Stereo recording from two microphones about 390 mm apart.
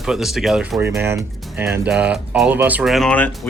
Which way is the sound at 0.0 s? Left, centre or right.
Centre.